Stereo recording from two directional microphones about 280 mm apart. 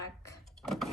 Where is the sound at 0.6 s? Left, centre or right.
Centre.